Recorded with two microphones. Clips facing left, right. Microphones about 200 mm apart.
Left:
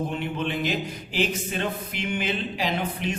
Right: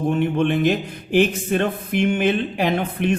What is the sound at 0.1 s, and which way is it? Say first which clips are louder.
A man's voice: right 9 dB; 55° right (ahead or behind).